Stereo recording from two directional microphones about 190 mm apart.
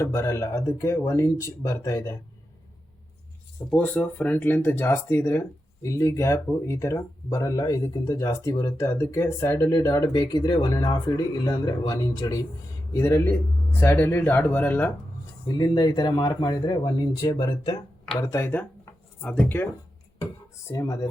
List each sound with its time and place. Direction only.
0.0 s speech: 15° left (ahead or behind)
3.7 s speech: 10° left (ahead or behind)
15.4 s speech: 20° left (ahead or behind)
20.7 s speech: 15° left (ahead or behind)